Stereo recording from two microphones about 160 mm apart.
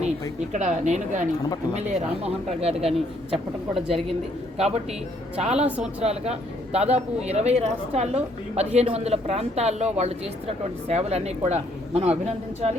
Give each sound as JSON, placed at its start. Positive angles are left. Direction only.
{"t": 0.5, "sound": "a woman's voice", "side_deg": -50}
{"t": 2.2, "sound": "speech", "side_deg": -40}
{"t": 3.3, "sound": "speech", "side_deg": 0}
{"t": 4.5, "sound": "speech", "side_deg": -40}
{"t": 5.6, "sound": "speech", "side_deg": -10}
{"t": 6.0, "sound": "speech", "side_deg": -40}